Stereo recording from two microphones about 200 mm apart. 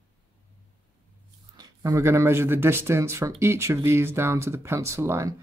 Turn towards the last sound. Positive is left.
turn(degrees=-15)  # may be behind; listen again after turning